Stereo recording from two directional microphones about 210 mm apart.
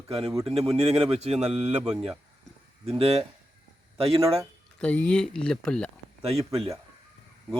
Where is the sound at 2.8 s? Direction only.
30° right (ahead or behind).